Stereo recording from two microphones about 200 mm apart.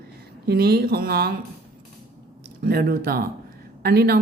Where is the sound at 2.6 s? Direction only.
50° right (ahead or behind).